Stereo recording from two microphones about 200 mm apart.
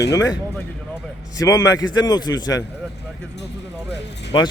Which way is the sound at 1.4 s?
20° left (ahead or behind).